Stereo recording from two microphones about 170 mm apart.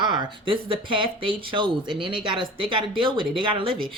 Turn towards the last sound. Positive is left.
turn(degrees=-30)  # may be behind; listen again after turning